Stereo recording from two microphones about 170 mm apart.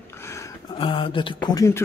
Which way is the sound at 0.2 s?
15° left (ahead or behind).